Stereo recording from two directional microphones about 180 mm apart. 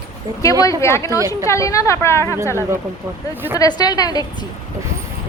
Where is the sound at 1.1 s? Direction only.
15° right (ahead or behind).